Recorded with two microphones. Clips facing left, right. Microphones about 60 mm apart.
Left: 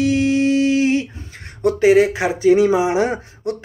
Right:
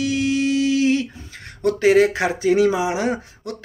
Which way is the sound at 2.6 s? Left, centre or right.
Left.